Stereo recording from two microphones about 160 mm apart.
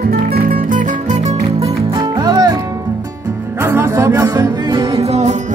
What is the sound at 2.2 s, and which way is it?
Music, 25° right (ahead or behind).